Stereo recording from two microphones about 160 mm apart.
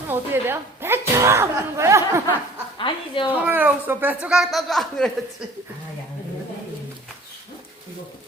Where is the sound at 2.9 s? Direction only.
30° left (ahead or behind).